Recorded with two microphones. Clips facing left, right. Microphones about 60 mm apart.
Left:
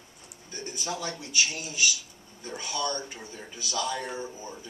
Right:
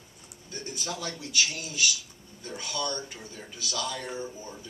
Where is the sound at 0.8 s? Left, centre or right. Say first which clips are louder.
Left 3 dB; centre.